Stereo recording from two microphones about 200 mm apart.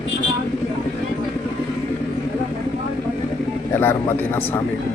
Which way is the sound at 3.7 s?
10° left (ahead or behind).